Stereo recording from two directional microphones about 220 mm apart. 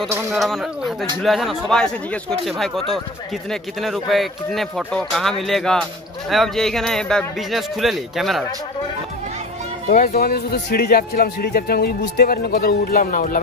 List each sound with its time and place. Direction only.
0.0 s a man's voice: centre (ahead or behind)
3.8 s a man's voice: centre (ahead or behind)
9.8 s speech: 40° left (ahead or behind)